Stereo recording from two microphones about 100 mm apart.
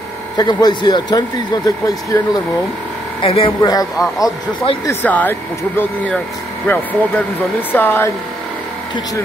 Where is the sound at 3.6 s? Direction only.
40° left (ahead or behind).